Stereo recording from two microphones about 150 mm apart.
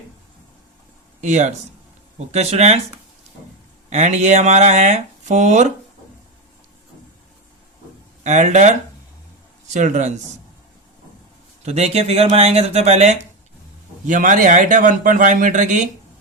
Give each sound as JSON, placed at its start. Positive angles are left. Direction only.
{"t": 1.2, "sound": "speech", "side_deg": -55}
{"t": 3.8, "sound": "speech", "side_deg": -50}
{"t": 8.2, "sound": "speech", "side_deg": -50}
{"t": 9.7, "sound": "speech", "side_deg": -50}
{"t": 11.6, "sound": "speech", "side_deg": -45}
{"t": 14.1, "sound": "speech", "side_deg": -60}